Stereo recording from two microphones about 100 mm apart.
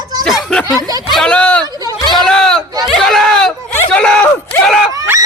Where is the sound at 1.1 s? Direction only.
10° left (ahead or behind).